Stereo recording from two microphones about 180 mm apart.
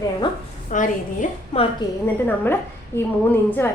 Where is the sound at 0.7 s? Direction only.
45° left (ahead or behind).